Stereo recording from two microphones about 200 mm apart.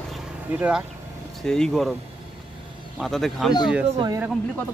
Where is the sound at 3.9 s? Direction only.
15° right (ahead or behind).